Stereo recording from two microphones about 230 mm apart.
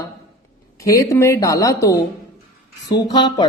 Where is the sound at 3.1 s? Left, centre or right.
Centre.